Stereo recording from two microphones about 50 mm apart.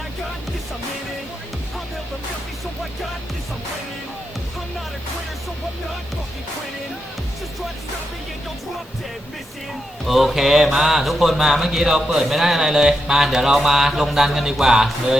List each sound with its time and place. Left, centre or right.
10.1 s a man's voice: centre